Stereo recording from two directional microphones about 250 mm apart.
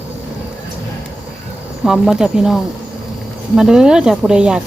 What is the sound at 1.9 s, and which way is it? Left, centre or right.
Speech, centre.